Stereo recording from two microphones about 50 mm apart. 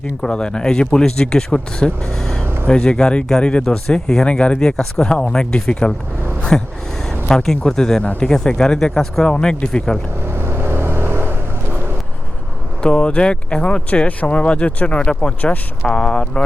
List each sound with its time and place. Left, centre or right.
0.2 s speech: centre
10.3 s vehicle: right
12.8 s speech: left